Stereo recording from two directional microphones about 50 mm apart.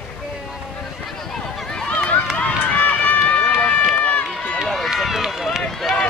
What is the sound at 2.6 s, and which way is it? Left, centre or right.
Run, left.